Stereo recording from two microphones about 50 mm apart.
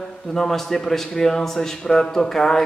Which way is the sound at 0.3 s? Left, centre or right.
Centre.